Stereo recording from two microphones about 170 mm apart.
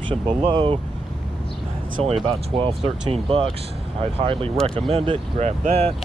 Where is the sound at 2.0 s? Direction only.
35° right (ahead or behind).